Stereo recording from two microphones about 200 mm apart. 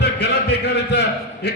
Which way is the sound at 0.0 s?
55° left (ahead or behind).